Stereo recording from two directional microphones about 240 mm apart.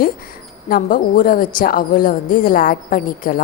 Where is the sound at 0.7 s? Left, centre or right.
Left.